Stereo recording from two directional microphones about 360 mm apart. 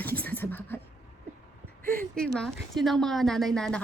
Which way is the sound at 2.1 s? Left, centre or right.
Centre.